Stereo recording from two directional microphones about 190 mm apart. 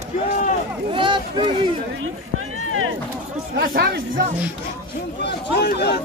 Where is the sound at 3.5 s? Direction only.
55° right (ahead or behind).